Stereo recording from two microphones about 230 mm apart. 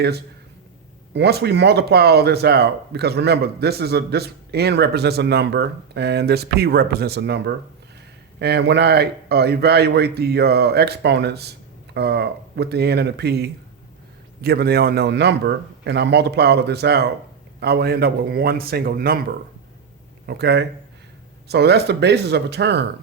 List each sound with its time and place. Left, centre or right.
1.1 s a man's voice: right